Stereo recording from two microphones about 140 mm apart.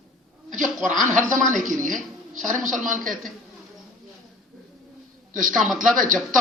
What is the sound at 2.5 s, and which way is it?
Speech, 70° right (ahead or behind).